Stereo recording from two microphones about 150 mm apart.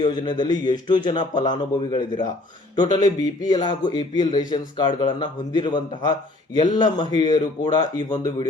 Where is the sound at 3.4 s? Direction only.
30° left (ahead or behind).